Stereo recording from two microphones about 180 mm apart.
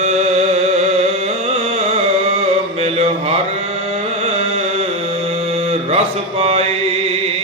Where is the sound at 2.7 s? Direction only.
35° right (ahead or behind).